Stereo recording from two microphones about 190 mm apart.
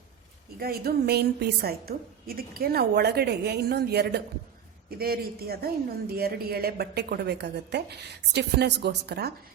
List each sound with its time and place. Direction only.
0.6 s speech: 55° right (ahead or behind)